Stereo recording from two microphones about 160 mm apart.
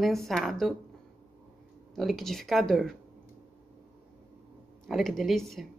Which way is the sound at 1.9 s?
Centre (ahead or behind).